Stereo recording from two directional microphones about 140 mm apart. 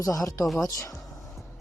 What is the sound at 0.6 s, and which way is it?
Music, 20° left (ahead or behind).